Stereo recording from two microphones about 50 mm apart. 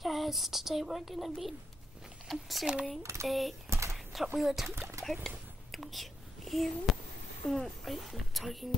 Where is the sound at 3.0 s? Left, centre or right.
Right.